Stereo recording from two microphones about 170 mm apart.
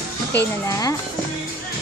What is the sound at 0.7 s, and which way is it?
Speech, 20° left (ahead or behind).